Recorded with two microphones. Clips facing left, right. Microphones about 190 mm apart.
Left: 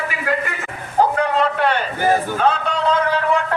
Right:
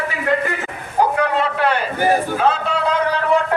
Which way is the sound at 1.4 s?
5° right (ahead or behind).